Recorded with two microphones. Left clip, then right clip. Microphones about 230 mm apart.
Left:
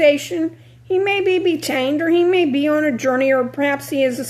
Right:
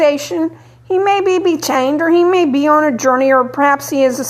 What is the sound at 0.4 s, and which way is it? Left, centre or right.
Speech, right.